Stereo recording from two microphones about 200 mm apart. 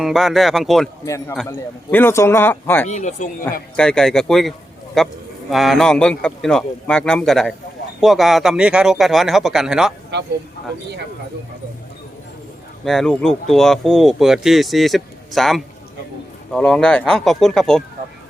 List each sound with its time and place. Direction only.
0.0 s speech: centre (ahead or behind)
1.0 s speech: 15° left (ahead or behind)
2.9 s speech: 35° left (ahead or behind)
3.8 s speech: 5° left (ahead or behind)
10.1 s speech: 55° right (ahead or behind)
12.8 s speech: centre (ahead or behind)